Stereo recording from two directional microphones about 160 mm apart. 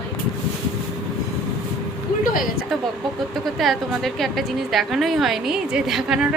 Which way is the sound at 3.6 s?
Centre (ahead or behind).